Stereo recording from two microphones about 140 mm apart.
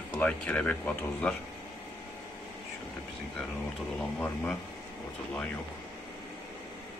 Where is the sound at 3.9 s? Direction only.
10° left (ahead or behind).